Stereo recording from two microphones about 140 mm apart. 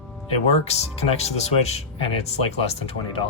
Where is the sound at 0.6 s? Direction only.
50° left (ahead or behind).